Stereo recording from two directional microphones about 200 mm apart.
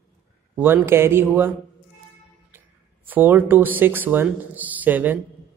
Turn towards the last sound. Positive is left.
turn(degrees=-10)  # may be behind; listen again after turning